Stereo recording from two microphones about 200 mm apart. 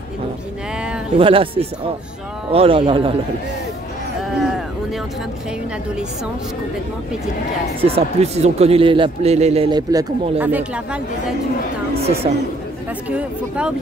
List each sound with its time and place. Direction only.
1.1 s a man's voice: 25° right (ahead or behind)
7.8 s a man's voice: 30° right (ahead or behind)
10.4 s speech: 5° right (ahead or behind)
13.1 s speech: 5° right (ahead or behind)